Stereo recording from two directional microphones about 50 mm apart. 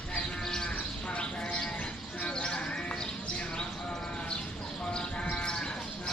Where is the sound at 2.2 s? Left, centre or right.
Left.